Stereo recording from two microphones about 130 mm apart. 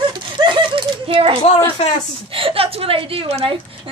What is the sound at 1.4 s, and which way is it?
Speech, 50° left (ahead or behind).